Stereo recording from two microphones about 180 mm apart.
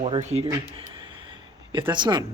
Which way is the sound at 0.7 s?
25° right (ahead or behind).